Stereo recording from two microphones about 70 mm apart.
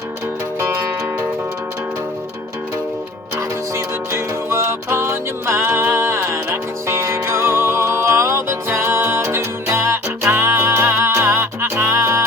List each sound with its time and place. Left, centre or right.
3.8 s music: right